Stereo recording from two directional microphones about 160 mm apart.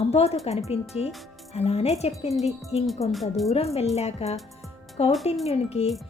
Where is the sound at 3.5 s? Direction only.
40° left (ahead or behind).